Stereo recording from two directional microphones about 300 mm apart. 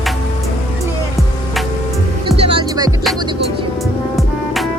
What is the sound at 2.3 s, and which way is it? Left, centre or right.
Music, centre.